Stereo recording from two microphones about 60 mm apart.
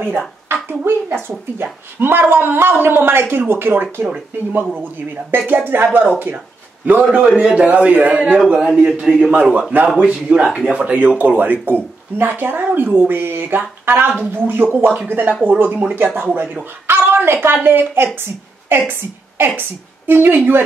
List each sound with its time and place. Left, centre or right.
0.5 s a woman's voice: right
6.3 s a sound: right
7.2 s a man's voice: centre
7.5 s a man's voice: right
8.5 s a man's voice: centre
9.3 s a man's voice: right
10.4 s speech: centre
10.7 s a man's voice: right
14.9 s a man's voice: right
16.8 s a woman's voice: right